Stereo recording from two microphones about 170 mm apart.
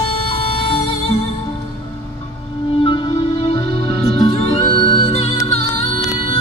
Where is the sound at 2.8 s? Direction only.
30° left (ahead or behind).